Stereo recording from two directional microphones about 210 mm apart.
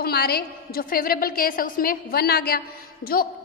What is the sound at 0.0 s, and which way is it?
A woman's voice, 45° left (ahead or behind).